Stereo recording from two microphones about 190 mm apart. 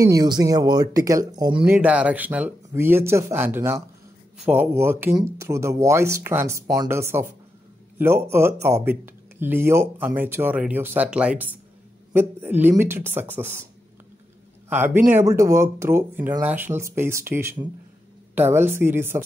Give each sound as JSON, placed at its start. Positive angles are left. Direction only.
{"t": 0.0, "sound": "speech", "side_deg": -20}
{"t": 1.7, "sound": "speech", "side_deg": -10}
{"t": 14.7, "sound": "speech", "side_deg": -10}